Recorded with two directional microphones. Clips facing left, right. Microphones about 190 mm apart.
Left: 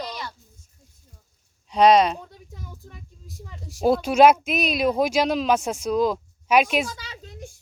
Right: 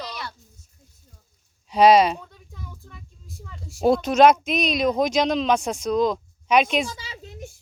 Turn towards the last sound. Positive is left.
turn(degrees=-10)  # may be behind; listen again after turning